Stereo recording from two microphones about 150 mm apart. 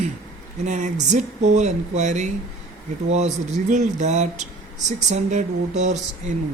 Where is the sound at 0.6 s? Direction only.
55° right (ahead or behind).